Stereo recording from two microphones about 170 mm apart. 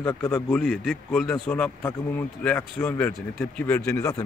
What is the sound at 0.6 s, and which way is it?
Speech, centre (ahead or behind).